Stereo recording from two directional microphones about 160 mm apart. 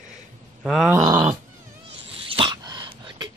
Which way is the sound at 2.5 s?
25° right (ahead or behind).